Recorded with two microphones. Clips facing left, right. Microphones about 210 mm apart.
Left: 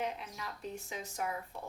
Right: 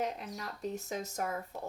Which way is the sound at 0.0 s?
40° right (ahead or behind).